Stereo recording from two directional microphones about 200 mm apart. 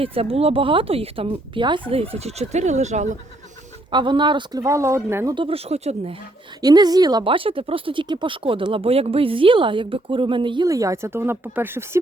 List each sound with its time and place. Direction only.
0.0 s speech: 30° right (ahead or behind)
3.9 s speech: 25° right (ahead or behind)
5.3 s speech: 25° right (ahead or behind)
6.6 s speech: 20° right (ahead or behind)